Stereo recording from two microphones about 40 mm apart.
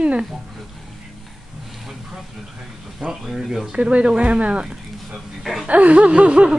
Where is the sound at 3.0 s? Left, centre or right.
Right.